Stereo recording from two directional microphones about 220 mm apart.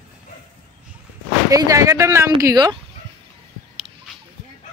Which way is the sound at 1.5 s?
15° right (ahead or behind).